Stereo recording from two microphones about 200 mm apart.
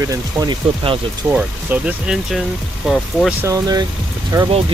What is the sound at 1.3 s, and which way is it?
Speech, 5° right (ahead or behind).